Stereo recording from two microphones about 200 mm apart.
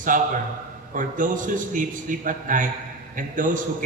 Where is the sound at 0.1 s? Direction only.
40° right (ahead or behind).